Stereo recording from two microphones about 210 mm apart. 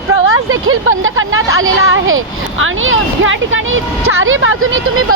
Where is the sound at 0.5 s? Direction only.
70° right (ahead or behind).